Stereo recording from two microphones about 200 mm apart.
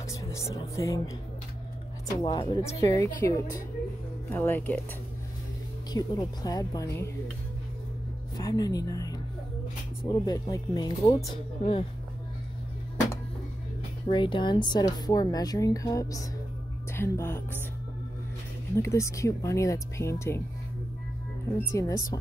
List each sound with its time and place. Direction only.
0.1 s speech: 15° left (ahead or behind)
5.9 s speech: 20° left (ahead or behind)
8.4 s speech: 20° left (ahead or behind)
14.0 s a woman's voice: 25° left (ahead or behind)
18.8 s speech: 15° left (ahead or behind)
21.7 s speech: 15° left (ahead or behind)